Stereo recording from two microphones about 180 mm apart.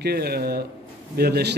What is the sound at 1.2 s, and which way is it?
Speech, 60° right (ahead or behind).